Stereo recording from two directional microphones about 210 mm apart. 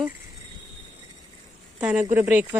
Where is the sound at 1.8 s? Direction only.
5° right (ahead or behind).